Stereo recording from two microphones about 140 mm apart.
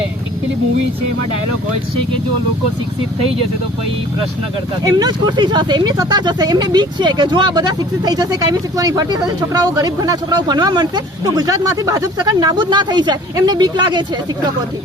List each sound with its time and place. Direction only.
4.8 s speech: 30° right (ahead or behind)